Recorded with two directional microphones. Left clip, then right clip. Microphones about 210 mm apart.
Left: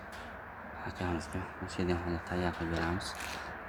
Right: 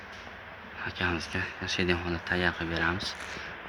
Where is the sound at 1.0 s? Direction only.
5° right (ahead or behind).